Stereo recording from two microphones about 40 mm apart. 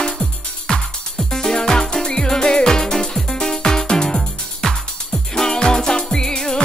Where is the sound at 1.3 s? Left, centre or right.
Centre.